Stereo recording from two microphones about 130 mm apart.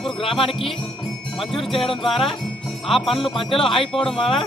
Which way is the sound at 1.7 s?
45° left (ahead or behind).